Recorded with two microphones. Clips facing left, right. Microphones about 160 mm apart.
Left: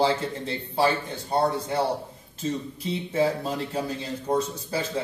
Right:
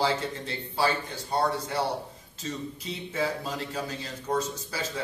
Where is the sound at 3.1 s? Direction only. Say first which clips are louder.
Left 5 dB; 30° left (ahead or behind).